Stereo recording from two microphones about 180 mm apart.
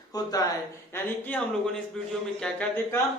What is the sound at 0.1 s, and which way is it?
Speech, 20° left (ahead or behind).